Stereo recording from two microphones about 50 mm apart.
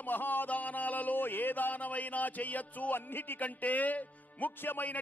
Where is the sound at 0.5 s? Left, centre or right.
Left.